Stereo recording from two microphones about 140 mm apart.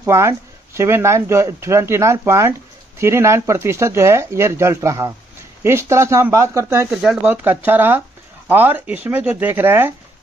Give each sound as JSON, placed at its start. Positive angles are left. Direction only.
{"t": 0.0, "sound": "speech", "side_deg": -20}
{"t": 6.9, "sound": "speech", "side_deg": -5}